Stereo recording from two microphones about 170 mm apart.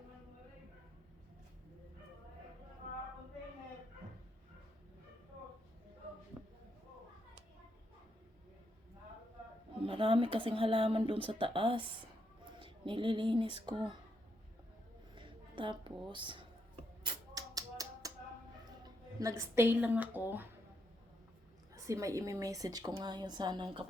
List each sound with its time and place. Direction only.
9.8 s a woman's voice: 30° right (ahead or behind)
15.1 s a sound: 30° right (ahead or behind)
17.0 s music: 25° right (ahead or behind)
19.2 s a woman's voice: 15° right (ahead or behind)
21.8 s a woman's voice: 20° right (ahead or behind)